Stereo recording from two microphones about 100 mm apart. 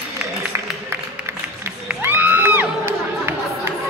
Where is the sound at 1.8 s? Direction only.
20° right (ahead or behind).